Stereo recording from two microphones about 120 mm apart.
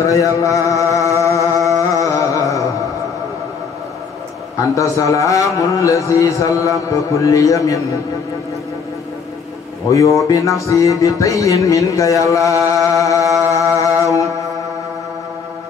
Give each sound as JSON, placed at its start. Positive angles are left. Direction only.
{"t": 0.0, "sound": "music", "side_deg": 25}
{"t": 1.8, "sound": "a sound", "side_deg": 30}
{"t": 4.7, "sound": "music", "side_deg": 25}
{"t": 9.8, "sound": "music", "side_deg": 25}